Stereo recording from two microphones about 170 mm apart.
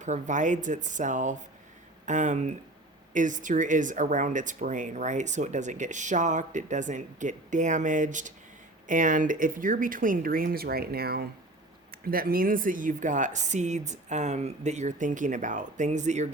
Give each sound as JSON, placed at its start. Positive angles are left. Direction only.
{"t": 0.0, "sound": "speech", "side_deg": -45}